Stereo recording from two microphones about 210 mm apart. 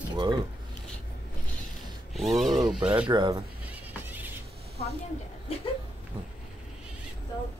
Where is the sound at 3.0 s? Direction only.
20° right (ahead or behind).